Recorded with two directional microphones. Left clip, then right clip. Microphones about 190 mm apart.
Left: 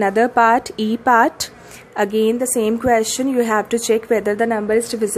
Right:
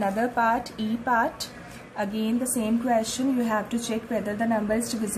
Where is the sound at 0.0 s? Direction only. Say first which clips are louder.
Left 10 dB; 45° left (ahead or behind).